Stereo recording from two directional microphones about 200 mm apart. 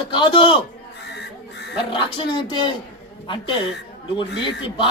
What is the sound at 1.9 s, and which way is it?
Speech, 25° left (ahead or behind).